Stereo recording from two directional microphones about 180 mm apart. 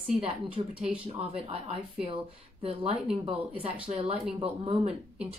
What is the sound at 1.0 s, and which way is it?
Speech, 30° right (ahead or behind).